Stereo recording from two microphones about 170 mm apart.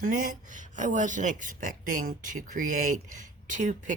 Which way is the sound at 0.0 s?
50° right (ahead or behind).